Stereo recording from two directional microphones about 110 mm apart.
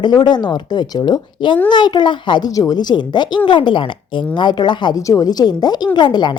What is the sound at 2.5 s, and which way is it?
Speech, 35° left (ahead or behind).